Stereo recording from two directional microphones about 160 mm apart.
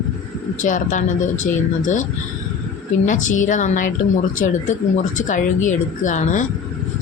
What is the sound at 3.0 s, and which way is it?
Speech, 50° left (ahead or behind).